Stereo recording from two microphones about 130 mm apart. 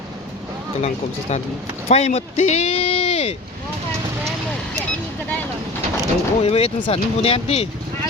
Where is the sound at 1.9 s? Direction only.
55° left (ahead or behind).